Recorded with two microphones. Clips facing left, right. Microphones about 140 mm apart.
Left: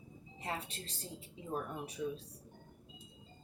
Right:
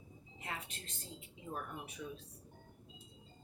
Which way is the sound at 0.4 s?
35° left (ahead or behind).